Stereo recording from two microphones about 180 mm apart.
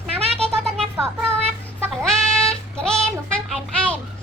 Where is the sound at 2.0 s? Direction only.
5° left (ahead or behind).